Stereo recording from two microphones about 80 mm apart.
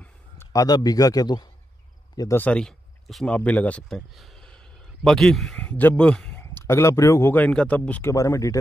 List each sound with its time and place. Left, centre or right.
0.4 s a man's voice: left
2.5 s speech: centre
3.3 s speech: centre
3.9 s speech: centre
4.5 s a sound: centre
5.6 s speech: centre
6.3 s speech: left
7.3 s speech: centre
8.0 s speech: left